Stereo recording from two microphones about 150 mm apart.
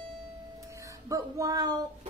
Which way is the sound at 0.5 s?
20° right (ahead or behind).